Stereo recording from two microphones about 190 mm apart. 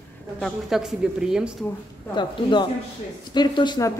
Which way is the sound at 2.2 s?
25° left (ahead or behind).